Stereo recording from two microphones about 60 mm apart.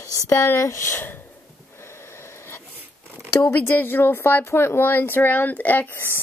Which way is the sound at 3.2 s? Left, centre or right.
Left.